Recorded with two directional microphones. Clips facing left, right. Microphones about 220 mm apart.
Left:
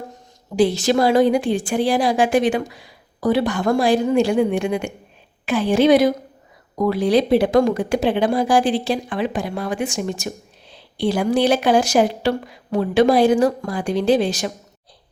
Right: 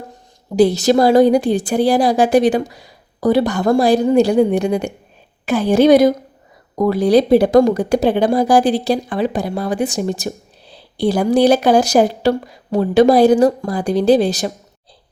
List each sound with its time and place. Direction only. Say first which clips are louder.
0.5 s speech: right 4 dB; 40° right (ahead or behind)